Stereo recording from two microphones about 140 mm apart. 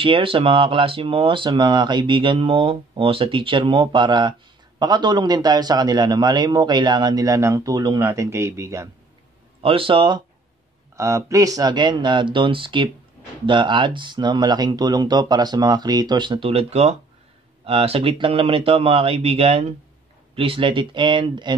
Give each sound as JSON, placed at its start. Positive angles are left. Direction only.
{"t": 0.0, "sound": "speech", "side_deg": -40}
{"t": 9.6, "sound": "speech", "side_deg": -40}
{"t": 11.0, "sound": "speech", "side_deg": -20}